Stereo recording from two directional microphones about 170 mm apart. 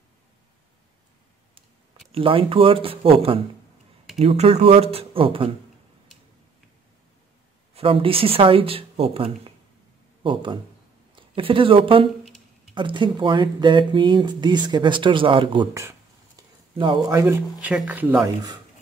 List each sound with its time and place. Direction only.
2.1 s speech: 30° right (ahead or behind)
7.7 s speech: 30° right (ahead or behind)
16.7 s speech: 30° right (ahead or behind)
17.2 s speech: 15° right (ahead or behind)